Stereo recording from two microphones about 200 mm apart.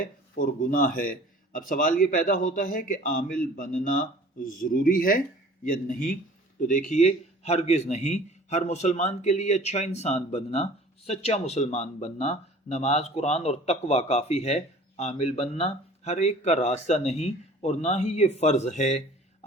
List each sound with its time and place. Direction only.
0.0 s a man's voice: 45° left (ahead or behind)